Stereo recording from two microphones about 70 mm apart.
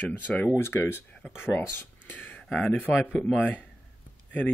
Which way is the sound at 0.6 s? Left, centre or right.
Left.